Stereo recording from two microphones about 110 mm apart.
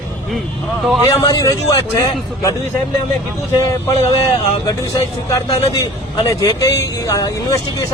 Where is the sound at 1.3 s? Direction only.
35° left (ahead or behind).